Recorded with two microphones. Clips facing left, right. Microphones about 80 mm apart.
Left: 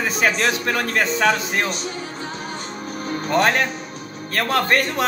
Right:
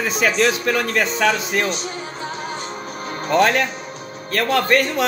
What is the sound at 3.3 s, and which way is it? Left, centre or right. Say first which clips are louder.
Speech: right 2 dB; left.